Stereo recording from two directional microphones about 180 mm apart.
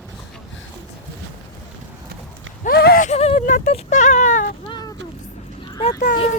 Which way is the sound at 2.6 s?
60° left (ahead or behind).